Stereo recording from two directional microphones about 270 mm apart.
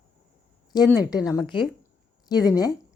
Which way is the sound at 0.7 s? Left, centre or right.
Centre.